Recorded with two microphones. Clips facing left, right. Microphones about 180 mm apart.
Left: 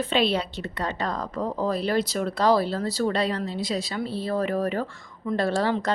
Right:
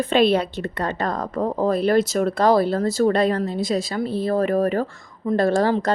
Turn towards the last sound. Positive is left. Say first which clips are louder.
# right 5 dB
turn(degrees=-45)  # may be behind; listen again after turning